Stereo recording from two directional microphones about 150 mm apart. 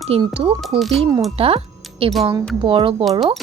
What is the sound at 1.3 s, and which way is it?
Speech, 40° right (ahead or behind).